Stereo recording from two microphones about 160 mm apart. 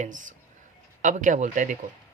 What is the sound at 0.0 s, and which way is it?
Speech, 55° right (ahead or behind).